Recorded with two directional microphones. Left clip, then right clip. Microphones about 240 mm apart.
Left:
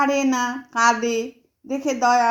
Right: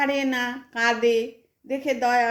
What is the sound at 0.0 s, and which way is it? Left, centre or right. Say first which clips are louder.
A woman's voice: left 4 dB; centre.